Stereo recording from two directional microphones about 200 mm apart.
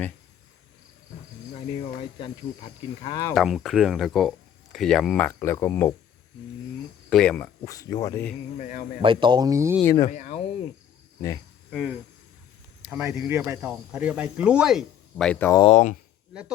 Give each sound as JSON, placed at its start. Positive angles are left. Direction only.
{"t": 1.5, "sound": "speech", "side_deg": 25}
{"t": 3.3, "sound": "speech", "side_deg": 0}
{"t": 7.1, "sound": "speech", "side_deg": 5}
{"t": 8.5, "sound": "speech", "side_deg": 40}
{"t": 9.0, "sound": "speech", "side_deg": -25}
{"t": 9.8, "sound": "speech", "side_deg": 15}
{"t": 10.1, "sound": "speech", "side_deg": 40}
{"t": 11.7, "sound": "speech", "side_deg": 0}
{"t": 15.5, "sound": "speech", "side_deg": 30}